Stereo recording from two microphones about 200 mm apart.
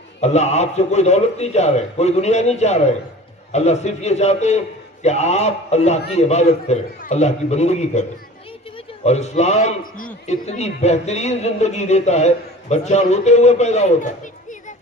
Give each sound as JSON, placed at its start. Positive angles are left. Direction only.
{"t": 0.2, "sound": "speech", "side_deg": 35}
{"t": 9.0, "sound": "speech", "side_deg": 35}